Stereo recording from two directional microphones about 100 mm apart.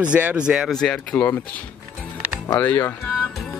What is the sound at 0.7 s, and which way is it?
Speech, 10° left (ahead or behind).